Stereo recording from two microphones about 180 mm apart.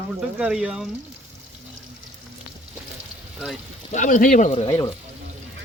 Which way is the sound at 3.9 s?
45° left (ahead or behind).